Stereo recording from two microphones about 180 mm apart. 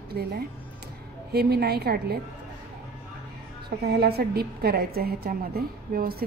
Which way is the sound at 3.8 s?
60° right (ahead or behind).